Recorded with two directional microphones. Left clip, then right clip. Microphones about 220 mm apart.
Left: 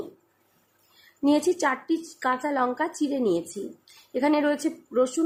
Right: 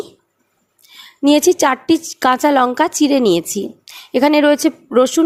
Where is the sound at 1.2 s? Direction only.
35° right (ahead or behind).